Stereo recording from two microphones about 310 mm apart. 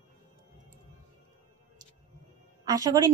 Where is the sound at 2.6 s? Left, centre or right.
Centre.